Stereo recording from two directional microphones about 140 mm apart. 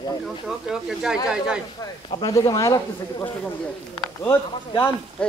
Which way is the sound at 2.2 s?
25° left (ahead or behind).